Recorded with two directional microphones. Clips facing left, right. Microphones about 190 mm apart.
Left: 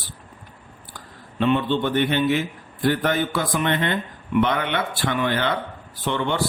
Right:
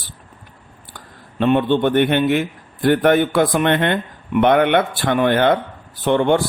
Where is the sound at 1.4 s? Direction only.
50° right (ahead or behind).